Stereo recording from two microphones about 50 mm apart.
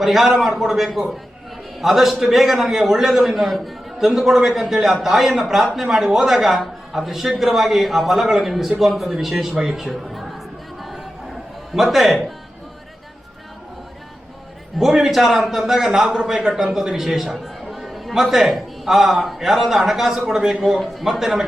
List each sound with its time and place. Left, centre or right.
0.0 s a man's voice: centre
9.2 s a sound: centre
11.7 s a man's voice: centre
14.8 s a man's voice: centre